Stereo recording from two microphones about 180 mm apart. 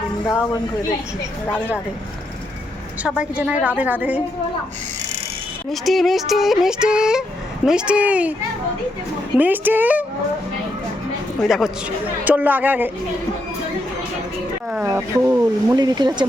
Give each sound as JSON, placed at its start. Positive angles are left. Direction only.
{"t": 3.0, "sound": "a woman's voice", "side_deg": -5}
{"t": 5.7, "sound": "speech", "side_deg": 0}
{"t": 9.4, "sound": "a woman's voice", "side_deg": -10}
{"t": 11.4, "sound": "a woman's voice", "side_deg": 0}
{"t": 14.7, "sound": "speech", "side_deg": -5}